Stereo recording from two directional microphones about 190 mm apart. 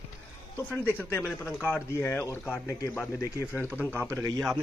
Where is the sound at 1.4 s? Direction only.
10° left (ahead or behind).